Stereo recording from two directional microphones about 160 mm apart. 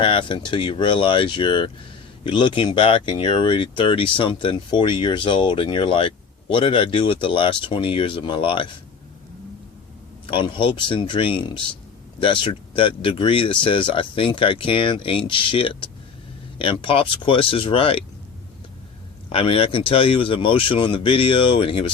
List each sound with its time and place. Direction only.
0.0 s speech: 30° left (ahead or behind)
10.2 s speech: 30° left (ahead or behind)
19.3 s speech: 35° left (ahead or behind)